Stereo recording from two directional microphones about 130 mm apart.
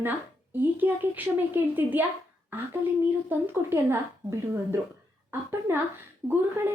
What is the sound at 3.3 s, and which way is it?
Speech, 20° right (ahead or behind).